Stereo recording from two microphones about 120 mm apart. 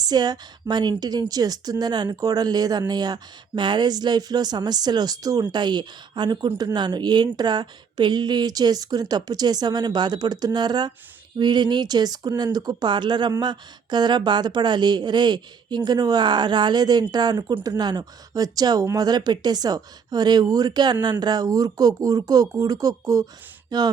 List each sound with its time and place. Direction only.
0.0 s a woman's voice: 35° right (ahead or behind)